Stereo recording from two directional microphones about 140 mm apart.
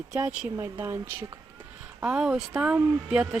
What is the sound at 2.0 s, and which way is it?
Speech, 5° right (ahead or behind).